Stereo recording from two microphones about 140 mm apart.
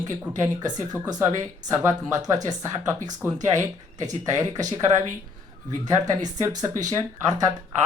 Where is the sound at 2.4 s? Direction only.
25° right (ahead or behind).